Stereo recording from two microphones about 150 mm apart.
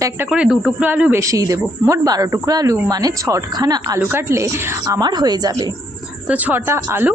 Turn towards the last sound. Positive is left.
turn(degrees=-15)  # may be behind; listen again after turning